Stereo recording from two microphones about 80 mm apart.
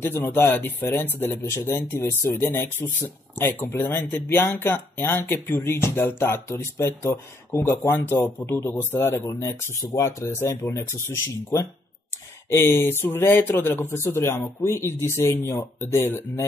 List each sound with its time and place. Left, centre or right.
0.0 s speech: left